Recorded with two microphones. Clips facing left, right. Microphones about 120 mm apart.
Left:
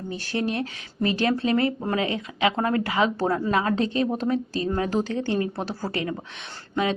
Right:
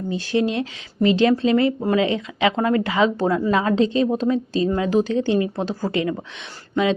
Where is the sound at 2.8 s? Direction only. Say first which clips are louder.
Right 4 dB; 20° right (ahead or behind).